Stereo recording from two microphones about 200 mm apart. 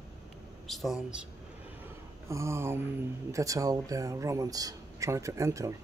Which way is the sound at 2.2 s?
15° right (ahead or behind).